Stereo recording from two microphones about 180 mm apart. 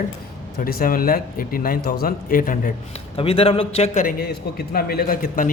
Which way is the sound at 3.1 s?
30° left (ahead or behind).